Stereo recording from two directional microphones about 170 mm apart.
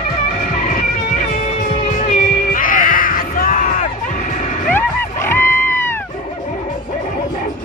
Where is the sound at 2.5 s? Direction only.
55° left (ahead or behind).